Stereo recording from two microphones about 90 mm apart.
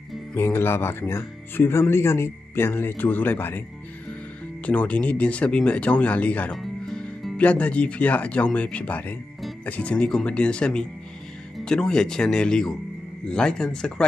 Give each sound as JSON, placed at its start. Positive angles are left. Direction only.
{"t": 0.4, "sound": "speech", "side_deg": 25}
{"t": 4.6, "sound": "speech", "side_deg": 15}
{"t": 6.6, "sound": "speech", "side_deg": 5}